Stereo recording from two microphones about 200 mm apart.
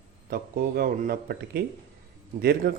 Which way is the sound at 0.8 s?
50° right (ahead or behind).